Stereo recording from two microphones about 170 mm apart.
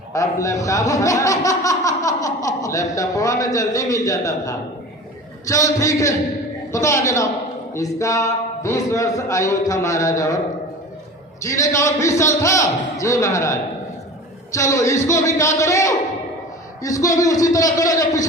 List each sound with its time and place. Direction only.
0.1 s a man's voice: 20° left (ahead or behind)
11.4 s a man's voice: 20° left (ahead or behind)